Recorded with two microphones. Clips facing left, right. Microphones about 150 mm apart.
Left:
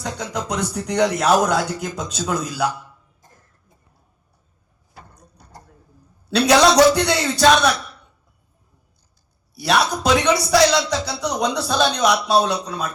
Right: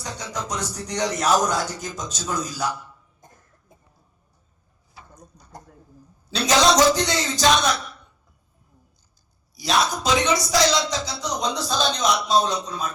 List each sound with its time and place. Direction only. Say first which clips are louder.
0.0 s speech: left 4 dB; 60° left (ahead or behind)
4.9 s a sound: left 1 dB; 60° left (ahead or behind)
6.3 s speech: left 5 dB; 65° left (ahead or behind)
9.6 s speech: left 3 dB; 65° left (ahead or behind)